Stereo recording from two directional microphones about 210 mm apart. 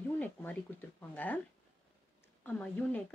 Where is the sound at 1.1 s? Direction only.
10° left (ahead or behind).